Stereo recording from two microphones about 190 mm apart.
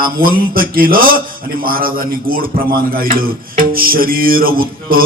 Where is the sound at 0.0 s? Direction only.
50° right (ahead or behind).